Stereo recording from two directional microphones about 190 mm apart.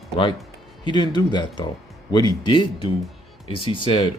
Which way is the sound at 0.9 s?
25° left (ahead or behind).